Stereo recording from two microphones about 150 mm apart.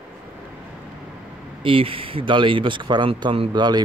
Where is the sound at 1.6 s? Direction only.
35° right (ahead or behind).